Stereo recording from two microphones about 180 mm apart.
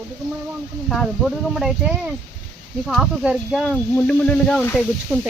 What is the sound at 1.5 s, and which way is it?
Speech, 5° right (ahead or behind).